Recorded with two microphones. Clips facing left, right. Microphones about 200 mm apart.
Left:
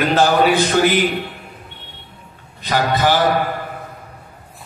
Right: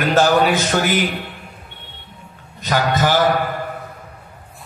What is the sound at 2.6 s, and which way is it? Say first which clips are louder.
Speech: even; 45° right (ahead or behind).